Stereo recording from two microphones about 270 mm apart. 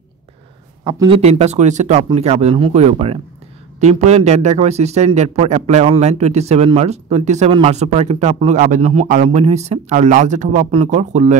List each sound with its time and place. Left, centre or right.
0.8 s speech: centre